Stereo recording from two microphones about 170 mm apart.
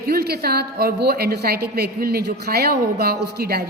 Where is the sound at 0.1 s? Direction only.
65° right (ahead or behind).